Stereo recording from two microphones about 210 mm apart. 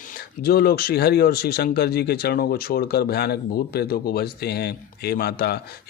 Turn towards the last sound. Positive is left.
turn(degrees=45)  # may be behind; listen again after turning